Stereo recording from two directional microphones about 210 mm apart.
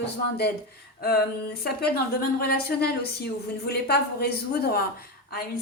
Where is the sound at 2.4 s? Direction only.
50° left (ahead or behind).